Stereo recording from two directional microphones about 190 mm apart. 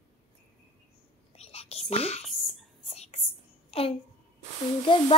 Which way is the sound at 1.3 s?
30° left (ahead or behind).